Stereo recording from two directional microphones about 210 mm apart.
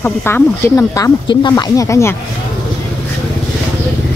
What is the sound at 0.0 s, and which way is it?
Speech, 10° left (ahead or behind).